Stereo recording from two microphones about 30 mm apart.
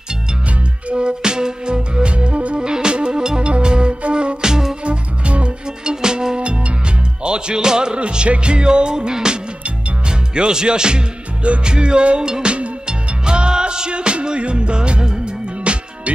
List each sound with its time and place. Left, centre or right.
0.9 s music: right
2.6 s music: right
3.4 s music: right
4.4 s music: centre
4.8 s music: right
5.9 s music: right
8.0 s music: right
10.0 s speech: right
11.6 s music: right